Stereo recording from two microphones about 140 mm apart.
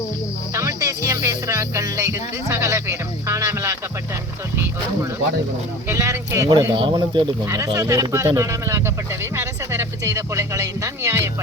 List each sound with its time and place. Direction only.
0.5 s music: 25° right (ahead or behind)
5.9 s speech: 20° right (ahead or behind)
6.7 s speech: 35° right (ahead or behind)
7.4 s speech: 20° right (ahead or behind)